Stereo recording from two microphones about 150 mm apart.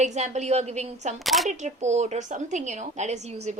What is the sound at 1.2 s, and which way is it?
Speech, centre (ahead or behind).